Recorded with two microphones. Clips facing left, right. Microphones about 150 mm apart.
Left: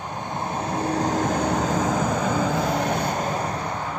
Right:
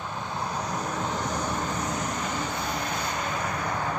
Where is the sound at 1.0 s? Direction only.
45° left (ahead or behind).